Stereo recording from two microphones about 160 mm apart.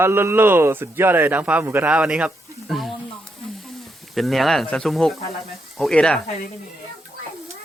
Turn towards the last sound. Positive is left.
turn(degrees=5)  # may be behind; listen again after turning